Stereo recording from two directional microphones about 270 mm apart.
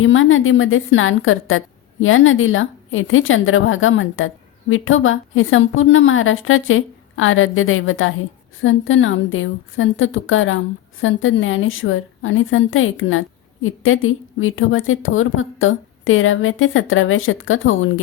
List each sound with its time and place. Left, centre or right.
0.0 s a woman's voice: left